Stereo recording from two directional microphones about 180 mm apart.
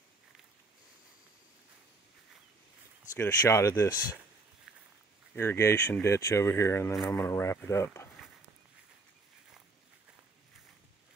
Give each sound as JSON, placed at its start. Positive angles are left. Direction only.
{"t": 3.2, "sound": "speech", "side_deg": 15}
{"t": 5.3, "sound": "speech", "side_deg": 15}